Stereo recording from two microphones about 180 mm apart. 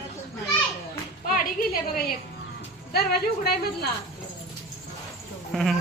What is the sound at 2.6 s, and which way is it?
Speech, 60° left (ahead or behind).